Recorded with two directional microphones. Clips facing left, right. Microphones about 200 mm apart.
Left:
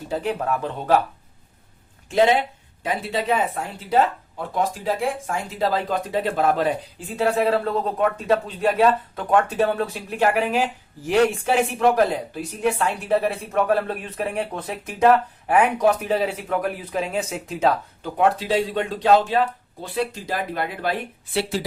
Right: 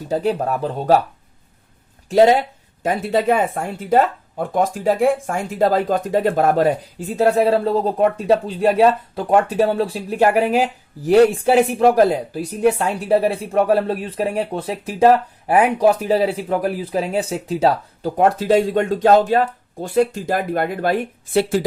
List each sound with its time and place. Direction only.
0.1 s speech: 35° right (ahead or behind)
2.0 s speech: 40° right (ahead or behind)